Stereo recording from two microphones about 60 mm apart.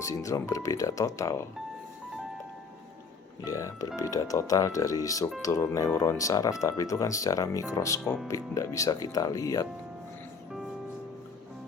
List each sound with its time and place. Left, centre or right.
0.0 s speech: left
3.4 s speech: left